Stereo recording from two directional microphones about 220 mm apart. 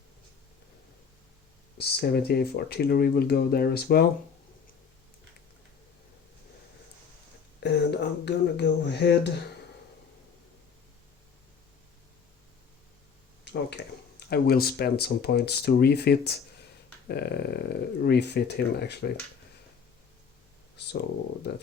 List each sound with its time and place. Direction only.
1.8 s speech: 45° left (ahead or behind)
7.6 s speech: 50° left (ahead or behind)
13.4 s speech: 50° left (ahead or behind)
20.8 s speech: 50° left (ahead or behind)